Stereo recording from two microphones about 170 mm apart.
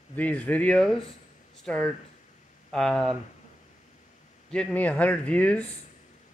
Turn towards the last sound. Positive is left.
turn(degrees=10)  # may be behind; listen again after turning